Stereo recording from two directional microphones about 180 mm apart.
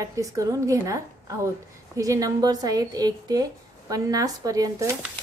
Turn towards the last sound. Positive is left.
turn(degrees=-20)  # may be behind; listen again after turning